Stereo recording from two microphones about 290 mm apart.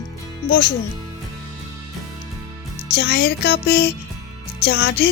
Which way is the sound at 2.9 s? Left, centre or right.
Left.